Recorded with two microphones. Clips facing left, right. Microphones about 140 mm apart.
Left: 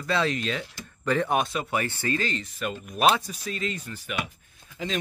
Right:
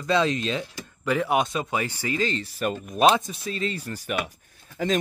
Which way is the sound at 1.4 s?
20° right (ahead or behind).